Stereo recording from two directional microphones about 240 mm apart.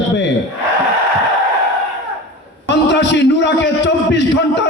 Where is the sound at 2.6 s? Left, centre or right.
Left.